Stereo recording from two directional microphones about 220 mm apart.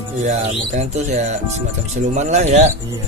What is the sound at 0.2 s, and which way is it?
A man's voice, 30° right (ahead or behind).